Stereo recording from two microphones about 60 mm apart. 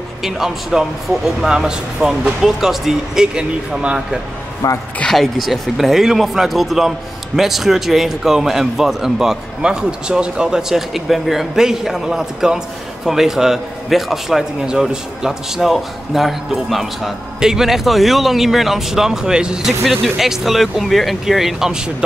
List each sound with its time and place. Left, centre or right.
0.2 s speech: centre
4.6 s speech: left
5.1 s a man's voice: centre
19.8 s a man's voice: centre